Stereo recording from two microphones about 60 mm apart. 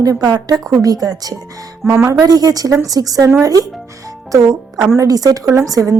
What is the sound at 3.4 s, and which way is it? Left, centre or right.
Speech, right.